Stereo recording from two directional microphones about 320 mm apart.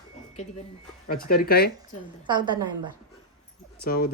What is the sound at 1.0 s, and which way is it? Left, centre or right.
Speech, left.